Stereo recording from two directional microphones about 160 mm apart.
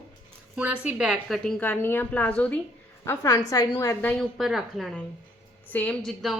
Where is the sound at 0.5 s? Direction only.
10° right (ahead or behind).